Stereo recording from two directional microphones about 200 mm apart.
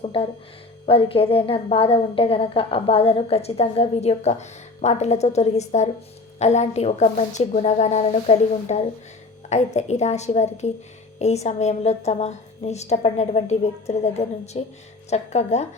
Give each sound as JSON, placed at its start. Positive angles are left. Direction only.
{"t": 0.0, "sound": "music", "side_deg": 30}
{"t": 0.9, "sound": "a woman's voice", "side_deg": 30}